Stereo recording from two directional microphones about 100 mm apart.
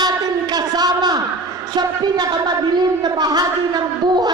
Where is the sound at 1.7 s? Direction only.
45° right (ahead or behind).